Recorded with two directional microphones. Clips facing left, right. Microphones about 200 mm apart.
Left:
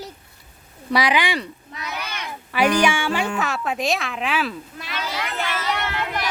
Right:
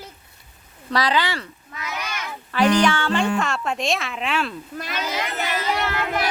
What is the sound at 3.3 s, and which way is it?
Speech, 5° left (ahead or behind).